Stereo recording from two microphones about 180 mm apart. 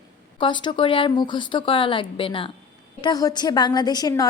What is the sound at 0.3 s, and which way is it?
A woman's voice, 25° left (ahead or behind).